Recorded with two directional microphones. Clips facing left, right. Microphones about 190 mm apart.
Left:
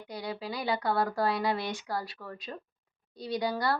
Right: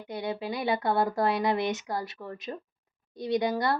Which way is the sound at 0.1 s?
25° right (ahead or behind).